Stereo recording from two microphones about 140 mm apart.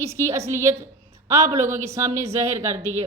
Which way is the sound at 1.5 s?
55° right (ahead or behind).